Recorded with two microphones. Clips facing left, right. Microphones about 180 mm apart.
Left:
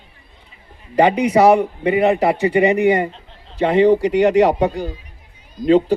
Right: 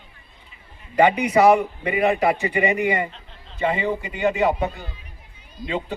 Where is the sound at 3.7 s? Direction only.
75° left (ahead or behind).